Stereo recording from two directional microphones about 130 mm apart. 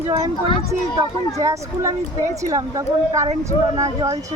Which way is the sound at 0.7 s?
25° right (ahead or behind).